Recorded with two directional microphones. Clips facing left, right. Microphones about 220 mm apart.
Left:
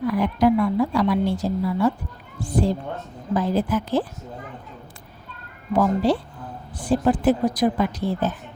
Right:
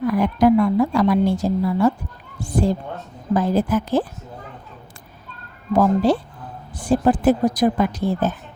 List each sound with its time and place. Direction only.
0.1 s a woman's voice: 45° right (ahead or behind)
5.7 s a woman's voice: 45° right (ahead or behind)